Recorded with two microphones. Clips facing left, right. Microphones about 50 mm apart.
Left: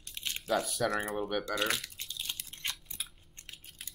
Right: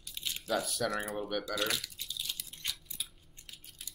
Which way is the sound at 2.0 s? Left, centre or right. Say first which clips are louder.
Even; left.